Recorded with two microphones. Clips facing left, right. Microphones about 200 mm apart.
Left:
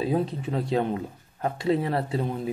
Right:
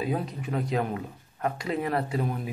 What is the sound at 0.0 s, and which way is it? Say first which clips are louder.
Speech: left 4 dB; 30° left (ahead or behind).